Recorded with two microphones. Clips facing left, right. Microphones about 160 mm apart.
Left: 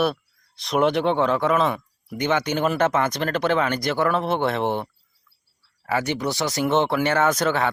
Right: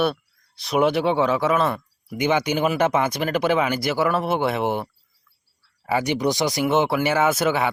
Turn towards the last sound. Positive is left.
turn(degrees=-10)  # may be behind; listen again after turning